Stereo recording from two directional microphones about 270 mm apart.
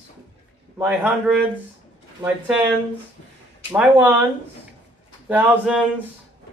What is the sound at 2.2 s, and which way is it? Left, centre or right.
Speech, centre.